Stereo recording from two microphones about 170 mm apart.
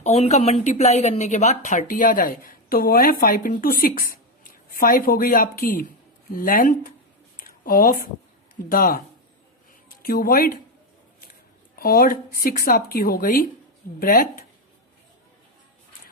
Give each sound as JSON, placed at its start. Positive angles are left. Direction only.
{"t": 0.0, "sound": "a woman's voice", "side_deg": 40}
{"t": 7.3, "sound": "a sound", "side_deg": 55}
{"t": 8.5, "sound": "speech", "side_deg": 55}
{"t": 10.0, "sound": "speech", "side_deg": 55}
{"t": 11.8, "sound": "speech", "side_deg": 60}